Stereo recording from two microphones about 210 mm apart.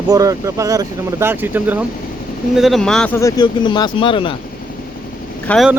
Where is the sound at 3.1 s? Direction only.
15° left (ahead or behind).